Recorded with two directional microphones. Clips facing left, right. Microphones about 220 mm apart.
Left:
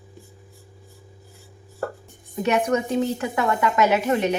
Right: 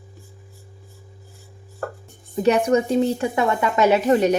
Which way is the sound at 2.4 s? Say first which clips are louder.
Right 4 dB; 30° right (ahead or behind).